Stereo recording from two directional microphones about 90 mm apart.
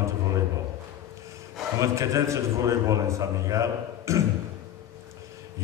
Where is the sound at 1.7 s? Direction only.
35° right (ahead or behind).